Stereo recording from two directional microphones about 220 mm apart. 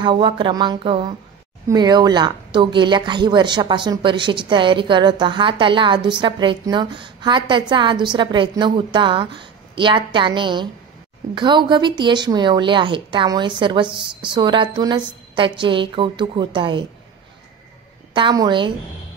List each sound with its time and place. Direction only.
0.0 s speech: 20° right (ahead or behind)
18.1 s speech: 20° right (ahead or behind)